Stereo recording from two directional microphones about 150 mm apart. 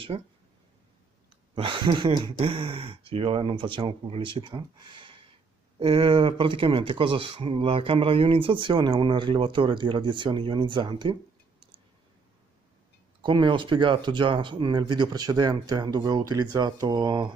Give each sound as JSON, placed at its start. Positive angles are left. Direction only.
{"t": 0.1, "sound": "speech", "side_deg": -35}
{"t": 1.5, "sound": "speech", "side_deg": -35}
{"t": 13.2, "sound": "speech", "side_deg": -30}